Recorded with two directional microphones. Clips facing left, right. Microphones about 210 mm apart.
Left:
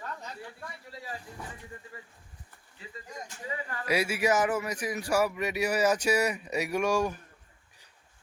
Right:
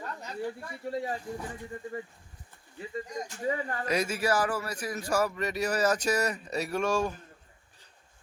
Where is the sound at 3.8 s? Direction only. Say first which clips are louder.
Left 2 dB; 10° left (ahead or behind).